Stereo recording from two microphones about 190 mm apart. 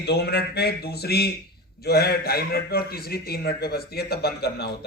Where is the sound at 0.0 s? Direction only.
60° left (ahead or behind).